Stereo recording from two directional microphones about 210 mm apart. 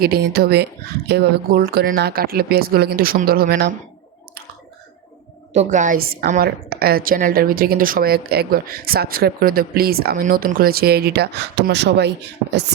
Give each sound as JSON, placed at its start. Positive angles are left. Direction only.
{"t": 0.0, "sound": "a woman's voice", "side_deg": -45}
{"t": 5.5, "sound": "a woman's voice", "side_deg": -35}